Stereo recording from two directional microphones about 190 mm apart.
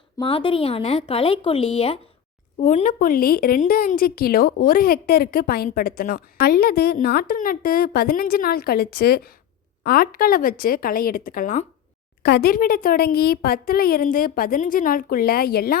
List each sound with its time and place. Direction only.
0.2 s a woman's voice: 25° left (ahead or behind); by 11.6 s 45° left (ahead or behind)
12.2 s a woman's voice: 55° left (ahead or behind)